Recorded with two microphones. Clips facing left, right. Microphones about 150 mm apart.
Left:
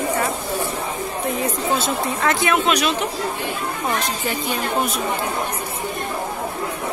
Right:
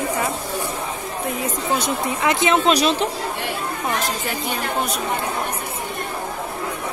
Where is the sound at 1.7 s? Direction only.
15° right (ahead or behind).